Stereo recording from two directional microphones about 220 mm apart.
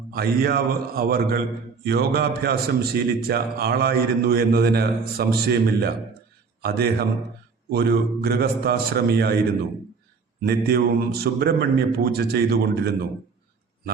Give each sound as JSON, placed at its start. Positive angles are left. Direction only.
{"t": 0.1, "sound": "a man's voice", "side_deg": -45}
{"t": 10.4, "sound": "a man's voice", "side_deg": -45}